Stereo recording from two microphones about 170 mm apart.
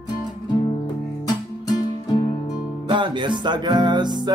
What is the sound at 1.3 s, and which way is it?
Music, 25° left (ahead or behind).